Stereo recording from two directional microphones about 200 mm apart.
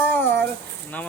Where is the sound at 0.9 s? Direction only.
10° left (ahead or behind).